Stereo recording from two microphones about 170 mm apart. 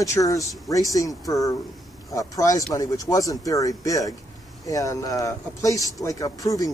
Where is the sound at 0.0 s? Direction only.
20° left (ahead or behind).